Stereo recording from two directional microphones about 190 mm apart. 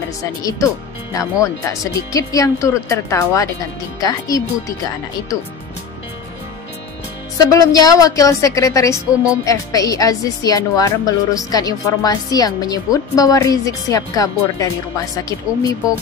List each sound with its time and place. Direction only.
0.2 s a woman's voice: 20° left (ahead or behind)
7.5 s a woman's voice: 20° left (ahead or behind)